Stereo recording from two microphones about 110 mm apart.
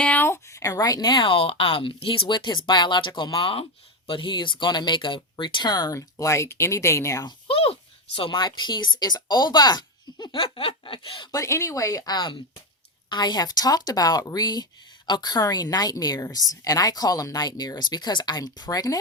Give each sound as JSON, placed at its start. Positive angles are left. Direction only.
{"t": 0.0, "sound": "speech", "side_deg": 15}
{"t": 7.3, "sound": "speech", "side_deg": 55}
{"t": 11.3, "sound": "speech", "side_deg": 30}